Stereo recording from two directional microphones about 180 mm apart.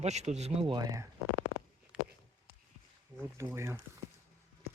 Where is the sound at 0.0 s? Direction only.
40° right (ahead or behind).